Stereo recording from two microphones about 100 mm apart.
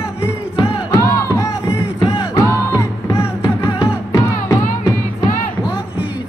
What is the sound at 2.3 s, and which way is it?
Music, 30° left (ahead or behind).